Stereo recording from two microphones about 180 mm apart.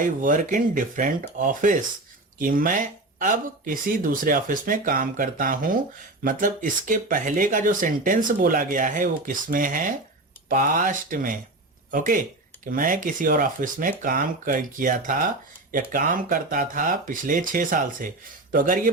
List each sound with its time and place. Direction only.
0.0 s speech: 45° right (ahead or behind)